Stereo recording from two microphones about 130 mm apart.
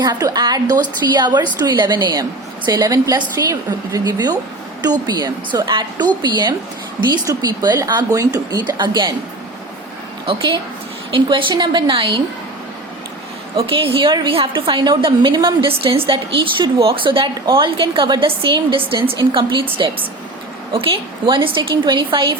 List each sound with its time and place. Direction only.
0.0 s a woman's voice: 30° right (ahead or behind)
11.1 s a woman's voice: 40° right (ahead or behind)
13.6 s a woman's voice: 45° right (ahead or behind)
20.7 s a woman's voice: 40° right (ahead or behind)